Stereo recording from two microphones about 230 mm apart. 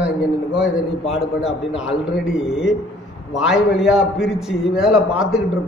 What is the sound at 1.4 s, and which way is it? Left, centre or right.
A man's voice, centre.